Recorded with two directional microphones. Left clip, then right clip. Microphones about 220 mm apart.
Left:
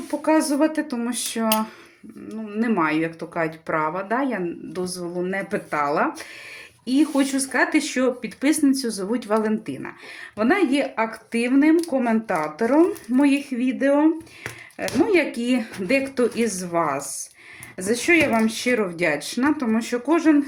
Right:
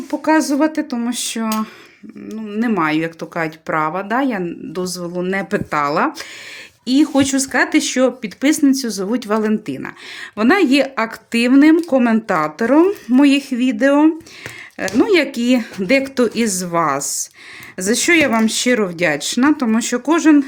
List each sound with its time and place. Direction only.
0.1 s speech: 35° right (ahead or behind)